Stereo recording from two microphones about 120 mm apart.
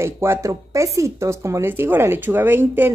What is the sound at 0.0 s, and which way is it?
Speech, 20° right (ahead or behind).